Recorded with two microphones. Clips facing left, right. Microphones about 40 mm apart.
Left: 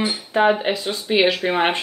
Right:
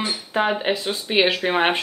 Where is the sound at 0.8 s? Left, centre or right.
Centre.